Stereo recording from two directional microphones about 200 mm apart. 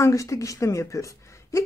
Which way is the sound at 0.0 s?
15° left (ahead or behind).